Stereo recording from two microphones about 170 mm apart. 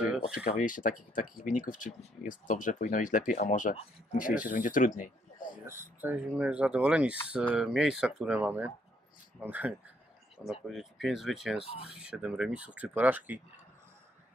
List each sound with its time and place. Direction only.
0.0 s a sound: 5° right (ahead or behind)
0.6 s speech: 50° left (ahead or behind)
5.7 s speech: 10° right (ahead or behind)
11.6 s speech: 35° left (ahead or behind)
11.9 s speech: 5° right (ahead or behind)